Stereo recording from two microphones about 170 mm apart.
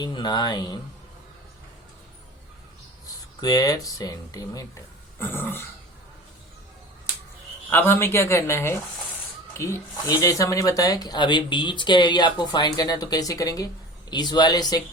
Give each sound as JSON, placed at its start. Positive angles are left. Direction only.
{"t": 0.0, "sound": "speech", "side_deg": 25}
{"t": 3.4, "sound": "speech", "side_deg": 20}
{"t": 7.7, "sound": "speech", "side_deg": 10}